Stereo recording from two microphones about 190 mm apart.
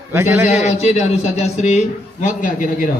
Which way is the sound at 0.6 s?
35° left (ahead or behind).